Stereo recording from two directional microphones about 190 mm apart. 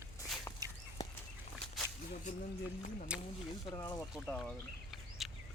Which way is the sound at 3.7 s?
20° left (ahead or behind).